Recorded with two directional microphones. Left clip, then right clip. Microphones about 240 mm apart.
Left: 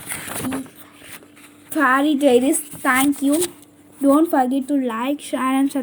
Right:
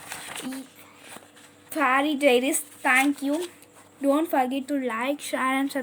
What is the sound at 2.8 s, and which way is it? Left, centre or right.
Speech, centre.